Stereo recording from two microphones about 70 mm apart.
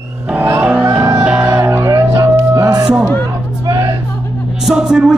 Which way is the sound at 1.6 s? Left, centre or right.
Right.